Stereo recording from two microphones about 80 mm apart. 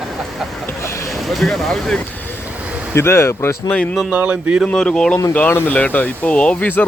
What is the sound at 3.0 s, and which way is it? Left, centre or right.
Speech, left.